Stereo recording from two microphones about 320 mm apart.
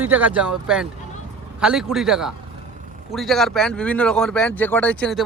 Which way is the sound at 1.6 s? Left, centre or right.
Centre.